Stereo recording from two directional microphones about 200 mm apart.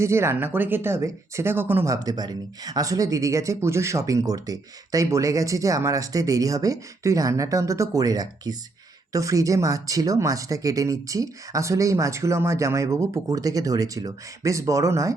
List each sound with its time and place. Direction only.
0.0 s speech: 15° right (ahead or behind)